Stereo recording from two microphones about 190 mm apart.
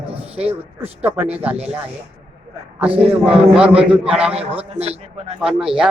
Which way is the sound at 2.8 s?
5° right (ahead or behind).